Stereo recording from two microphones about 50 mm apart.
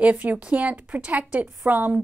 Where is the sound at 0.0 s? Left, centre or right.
Right.